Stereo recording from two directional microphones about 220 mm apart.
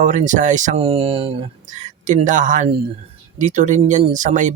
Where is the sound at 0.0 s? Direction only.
35° right (ahead or behind).